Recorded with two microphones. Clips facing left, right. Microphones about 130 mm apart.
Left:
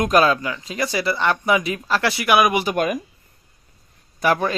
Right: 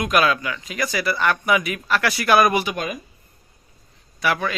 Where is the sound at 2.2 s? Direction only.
15° left (ahead or behind).